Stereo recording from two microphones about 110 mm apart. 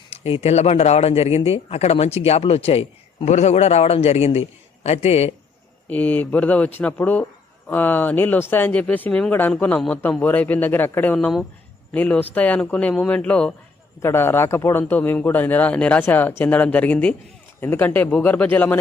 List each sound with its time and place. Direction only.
0.1 s speech: 60° left (ahead or behind)
5.9 s a man's voice: 15° left (ahead or behind)
14.0 s a man's voice: 20° left (ahead or behind)